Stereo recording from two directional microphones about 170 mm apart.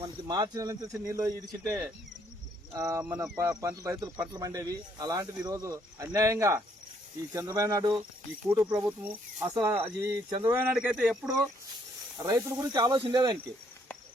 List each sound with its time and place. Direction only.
0.0 s speech: 25° right (ahead or behind)
2.7 s speech: 15° right (ahead or behind)
12.1 s speech: 20° right (ahead or behind)